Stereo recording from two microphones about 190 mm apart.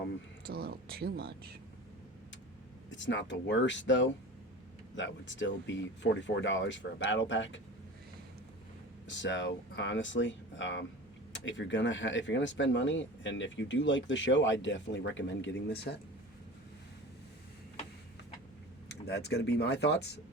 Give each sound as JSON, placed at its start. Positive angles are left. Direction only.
{"t": 0.4, "sound": "speech", "side_deg": -55}
{"t": 2.9, "sound": "speech", "side_deg": 75}
{"t": 9.0, "sound": "speech", "side_deg": 70}
{"t": 18.9, "sound": "speech", "side_deg": 60}